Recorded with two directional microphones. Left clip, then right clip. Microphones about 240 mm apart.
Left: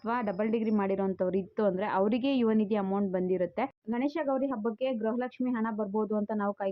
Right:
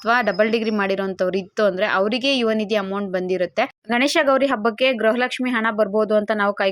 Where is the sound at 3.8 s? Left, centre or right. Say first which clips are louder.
Right 16 dB; right.